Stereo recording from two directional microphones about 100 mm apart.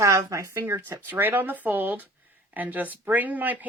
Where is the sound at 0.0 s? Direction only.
30° right (ahead or behind).